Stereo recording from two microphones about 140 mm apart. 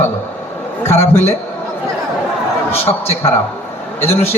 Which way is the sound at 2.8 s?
15° left (ahead or behind).